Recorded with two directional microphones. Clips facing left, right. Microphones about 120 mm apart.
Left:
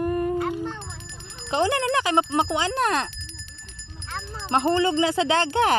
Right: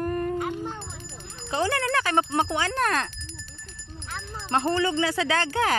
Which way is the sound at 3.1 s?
40° right (ahead or behind).